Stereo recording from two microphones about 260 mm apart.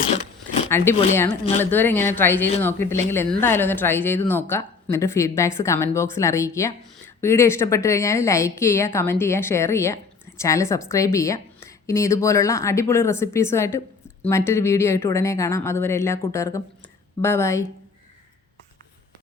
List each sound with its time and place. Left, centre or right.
0.7 s a woman's voice: centre